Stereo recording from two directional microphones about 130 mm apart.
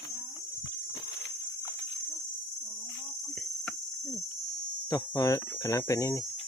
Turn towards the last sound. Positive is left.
turn(degrees=25)  # may be behind; listen again after turning